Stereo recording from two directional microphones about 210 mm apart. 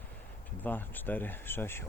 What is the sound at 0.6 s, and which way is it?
Speech, 10° left (ahead or behind).